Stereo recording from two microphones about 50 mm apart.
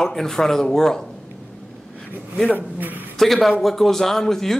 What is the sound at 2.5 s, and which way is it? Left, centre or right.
Speech, right.